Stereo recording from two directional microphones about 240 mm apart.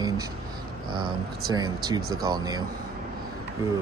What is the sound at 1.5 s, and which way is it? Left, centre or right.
Speech, centre.